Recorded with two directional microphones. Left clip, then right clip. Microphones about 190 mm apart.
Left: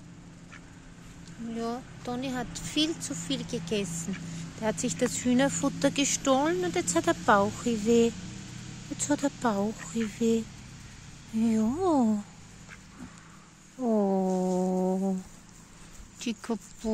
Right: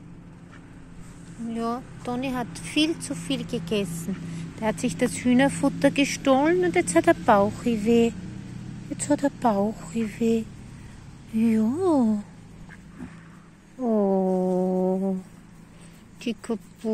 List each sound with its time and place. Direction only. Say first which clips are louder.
1.5 s a woman's voice: right 5 dB; centre (ahead or behind)
13.8 s music: right 4 dB; 15° left (ahead or behind)
16.2 s speech: right 4 dB; 20° left (ahead or behind)